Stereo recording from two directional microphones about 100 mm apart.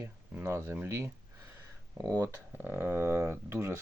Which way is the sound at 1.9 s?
40° right (ahead or behind).